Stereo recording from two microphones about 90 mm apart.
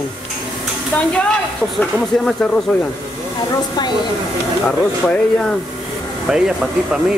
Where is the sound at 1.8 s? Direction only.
15° left (ahead or behind).